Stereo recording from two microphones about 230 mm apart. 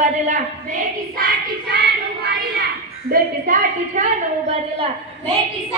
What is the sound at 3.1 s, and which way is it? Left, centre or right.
Speech, right.